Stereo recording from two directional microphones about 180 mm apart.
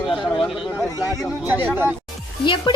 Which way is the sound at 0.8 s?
20° left (ahead or behind).